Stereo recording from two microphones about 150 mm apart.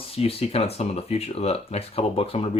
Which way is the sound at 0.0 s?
40° left (ahead or behind).